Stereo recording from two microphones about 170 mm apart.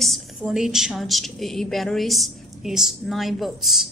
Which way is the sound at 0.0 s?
Centre (ahead or behind).